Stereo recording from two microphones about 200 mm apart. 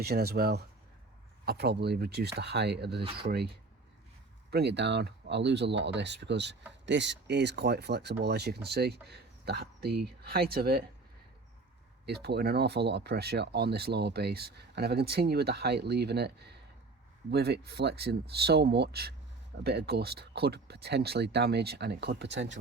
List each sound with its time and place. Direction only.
0.0 s speech: 50° right (ahead or behind)
4.5 s speech: 60° right (ahead or behind)
12.0 s speech: 55° right (ahead or behind)